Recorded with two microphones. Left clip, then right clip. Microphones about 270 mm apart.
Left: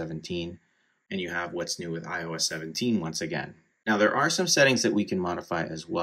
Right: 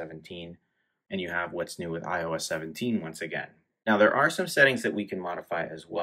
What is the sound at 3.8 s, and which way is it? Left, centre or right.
Speech, centre.